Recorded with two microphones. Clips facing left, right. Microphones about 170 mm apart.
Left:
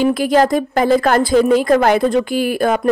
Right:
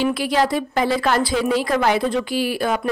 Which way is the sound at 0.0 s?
45° left (ahead or behind).